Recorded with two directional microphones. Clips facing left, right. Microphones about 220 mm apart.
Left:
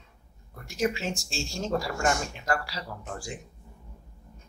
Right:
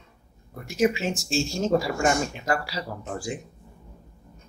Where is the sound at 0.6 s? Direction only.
5° right (ahead or behind).